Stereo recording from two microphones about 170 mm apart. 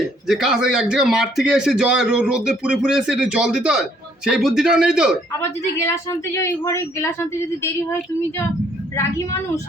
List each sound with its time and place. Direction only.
0.3 s a man's voice: 5° right (ahead or behind)
5.4 s a woman's voice: 15° left (ahead or behind)